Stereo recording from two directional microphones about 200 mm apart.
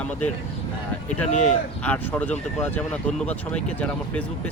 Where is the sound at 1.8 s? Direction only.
5° left (ahead or behind).